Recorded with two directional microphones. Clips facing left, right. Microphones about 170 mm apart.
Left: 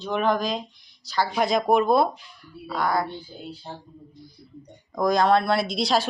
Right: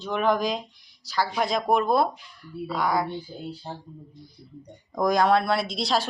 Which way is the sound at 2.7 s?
10° right (ahead or behind).